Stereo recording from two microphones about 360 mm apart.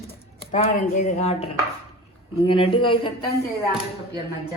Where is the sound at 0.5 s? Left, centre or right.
Centre.